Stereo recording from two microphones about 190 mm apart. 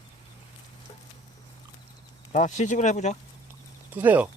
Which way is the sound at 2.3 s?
40° left (ahead or behind).